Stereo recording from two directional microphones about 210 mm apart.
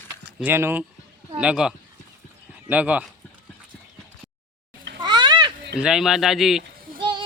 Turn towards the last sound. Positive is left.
turn(degrees=-20)  # may be behind; listen again after turning